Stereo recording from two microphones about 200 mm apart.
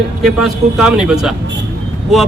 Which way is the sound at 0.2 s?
Centre (ahead or behind).